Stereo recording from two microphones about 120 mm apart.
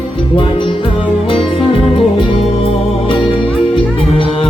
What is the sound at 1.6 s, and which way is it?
Music, 50° left (ahead or behind).